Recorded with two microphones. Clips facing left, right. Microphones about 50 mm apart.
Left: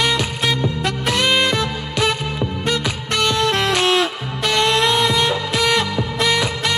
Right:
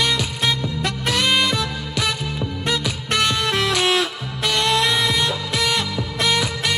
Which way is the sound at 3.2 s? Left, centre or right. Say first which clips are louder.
Left 4 dB; left.